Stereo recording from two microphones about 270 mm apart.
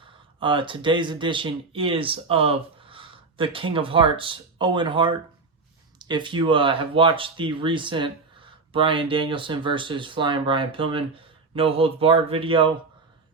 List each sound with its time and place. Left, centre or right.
0.0 s speech: centre